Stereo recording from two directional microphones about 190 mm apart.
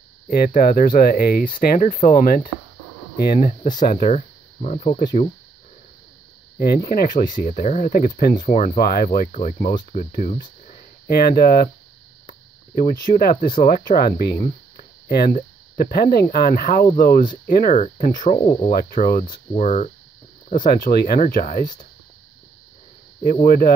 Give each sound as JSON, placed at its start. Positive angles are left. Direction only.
{"t": 0.5, "sound": "speech", "side_deg": 45}
{"t": 3.8, "sound": "speech", "side_deg": 40}
{"t": 6.6, "sound": "speech", "side_deg": 55}
{"t": 11.1, "sound": "speech", "side_deg": 55}
{"t": 18.4, "sound": "speech", "side_deg": 25}
{"t": 18.7, "sound": "speech", "side_deg": 50}
{"t": 23.2, "sound": "speech", "side_deg": 45}